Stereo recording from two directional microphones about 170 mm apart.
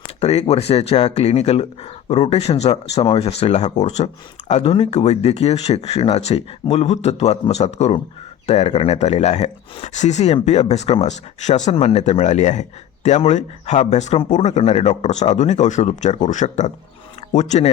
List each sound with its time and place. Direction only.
0.2 s speech: 40° left (ahead or behind)